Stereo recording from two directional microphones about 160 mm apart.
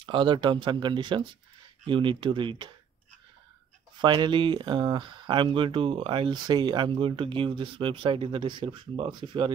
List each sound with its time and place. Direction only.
0.0 s speech: 30° right (ahead or behind)
4.0 s speech: 30° right (ahead or behind)